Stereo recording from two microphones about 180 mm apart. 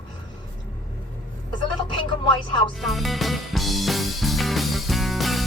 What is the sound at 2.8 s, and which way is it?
Music, centre (ahead or behind).